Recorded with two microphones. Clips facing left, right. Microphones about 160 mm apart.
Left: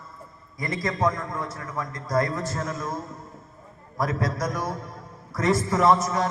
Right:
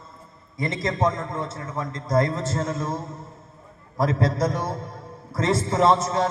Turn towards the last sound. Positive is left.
turn(degrees=-25)  # may be behind; listen again after turning